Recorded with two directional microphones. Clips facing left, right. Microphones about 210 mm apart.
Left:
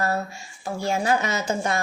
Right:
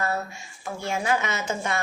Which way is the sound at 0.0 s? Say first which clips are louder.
Left 3 dB; 35° left (ahead or behind).